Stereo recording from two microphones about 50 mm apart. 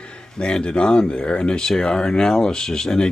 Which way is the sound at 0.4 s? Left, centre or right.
Centre.